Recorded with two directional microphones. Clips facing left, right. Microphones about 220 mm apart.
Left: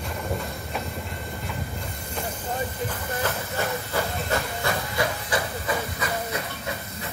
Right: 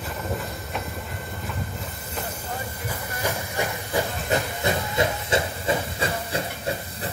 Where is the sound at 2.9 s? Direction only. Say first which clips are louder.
Left 1 dB; 10° right (ahead or behind); by 7.1 s 30° right (ahead or behind).